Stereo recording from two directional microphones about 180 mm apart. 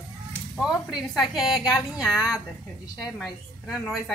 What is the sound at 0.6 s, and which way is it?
A woman's voice, 5° right (ahead or behind).